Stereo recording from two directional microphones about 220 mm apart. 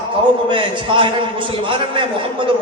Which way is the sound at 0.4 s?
20° right (ahead or behind).